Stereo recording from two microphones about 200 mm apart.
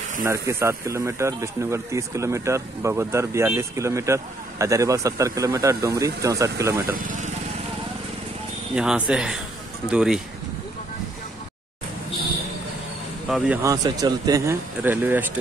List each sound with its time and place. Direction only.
0.2 s speech: 15° right (ahead or behind)
6.9 s speech: 45° right (ahead or behind)
8.7 s speech: 5° right (ahead or behind)
13.3 s speech: 10° right (ahead or behind)